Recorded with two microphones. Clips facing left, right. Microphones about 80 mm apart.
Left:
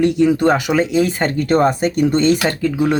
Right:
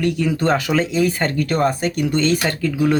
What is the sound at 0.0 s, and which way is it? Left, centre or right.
Speech, left.